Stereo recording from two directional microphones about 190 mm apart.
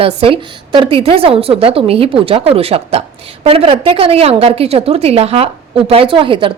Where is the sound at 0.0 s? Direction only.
30° right (ahead or behind).